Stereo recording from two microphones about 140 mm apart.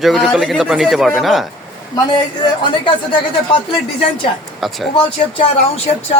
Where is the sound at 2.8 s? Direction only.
35° left (ahead or behind).